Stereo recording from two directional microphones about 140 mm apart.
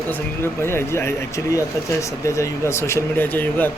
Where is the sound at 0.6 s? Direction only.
20° left (ahead or behind).